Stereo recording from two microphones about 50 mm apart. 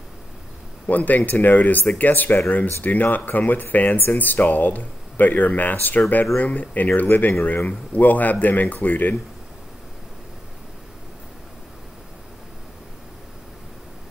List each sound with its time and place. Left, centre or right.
0.8 s speech: left